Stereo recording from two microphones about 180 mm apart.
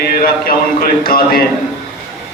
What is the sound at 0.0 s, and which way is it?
A man's voice, 55° left (ahead or behind).